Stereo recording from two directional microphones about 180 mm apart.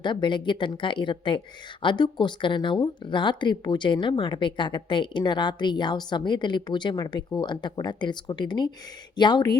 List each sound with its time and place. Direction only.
0.0 s speech: 25° left (ahead or behind)